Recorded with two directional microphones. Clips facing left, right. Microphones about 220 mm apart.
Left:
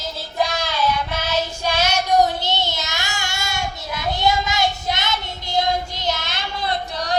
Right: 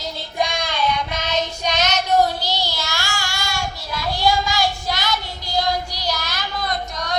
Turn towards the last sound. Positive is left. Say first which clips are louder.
# left 2 dB
turn(degrees=30)  # may be behind; listen again after turning